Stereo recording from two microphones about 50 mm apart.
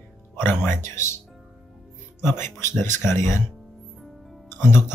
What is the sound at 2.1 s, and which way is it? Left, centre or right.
Speech, left.